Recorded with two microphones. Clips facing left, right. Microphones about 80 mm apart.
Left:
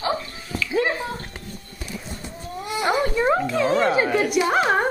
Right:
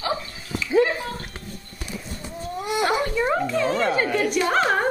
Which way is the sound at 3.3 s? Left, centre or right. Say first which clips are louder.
Left 3 dB; centre.